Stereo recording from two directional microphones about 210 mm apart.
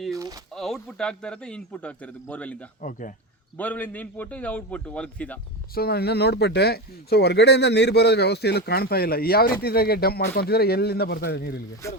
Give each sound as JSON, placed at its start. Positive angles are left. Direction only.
{"t": 0.5, "sound": "a man's voice", "side_deg": 0}
{"t": 5.7, "sound": "speech", "side_deg": 50}
{"t": 11.8, "sound": "a man's voice", "side_deg": 15}